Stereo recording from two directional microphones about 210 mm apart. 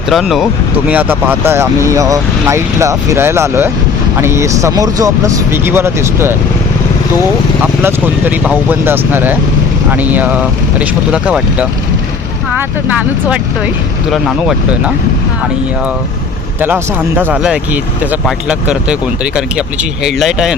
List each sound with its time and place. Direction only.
0.1 s speech: centre (ahead or behind)
7.6 s speech: 10° right (ahead or behind)
16.6 s speech: 10° right (ahead or behind)